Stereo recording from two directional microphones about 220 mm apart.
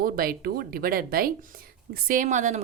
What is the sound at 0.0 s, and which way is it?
A woman's voice, 40° right (ahead or behind).